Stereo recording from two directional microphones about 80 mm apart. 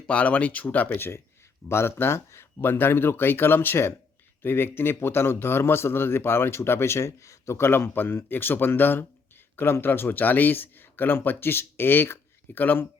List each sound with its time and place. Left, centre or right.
0.1 s a man's voice: centre